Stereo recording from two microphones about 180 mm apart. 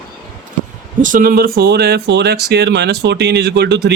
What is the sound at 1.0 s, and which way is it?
Speech, 50° right (ahead or behind).